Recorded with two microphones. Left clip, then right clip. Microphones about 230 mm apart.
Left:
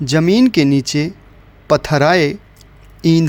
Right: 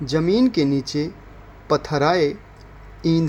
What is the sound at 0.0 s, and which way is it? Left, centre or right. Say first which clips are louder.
A man's voice: left 5 dB; left.